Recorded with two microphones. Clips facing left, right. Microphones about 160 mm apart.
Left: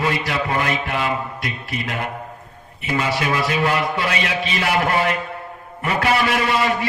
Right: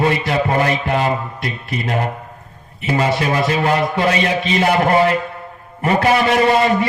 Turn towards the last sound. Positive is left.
turn(degrees=-35)  # may be behind; listen again after turning